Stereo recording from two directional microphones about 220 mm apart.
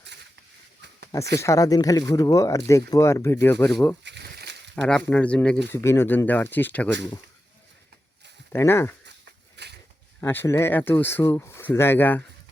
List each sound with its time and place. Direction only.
0.0 s a sound: 50° right (ahead or behind)
1.4 s speech: 15° left (ahead or behind)
4.0 s crumpling: 50° right (ahead or behind)
4.7 s speech: 5° left (ahead or behind)
8.5 s speech: 10° left (ahead or behind)
9.6 s a sound: 50° right (ahead or behind)
10.2 s speech: 10° left (ahead or behind)